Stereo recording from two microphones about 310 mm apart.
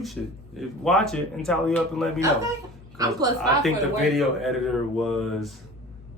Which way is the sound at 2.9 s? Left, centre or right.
Centre.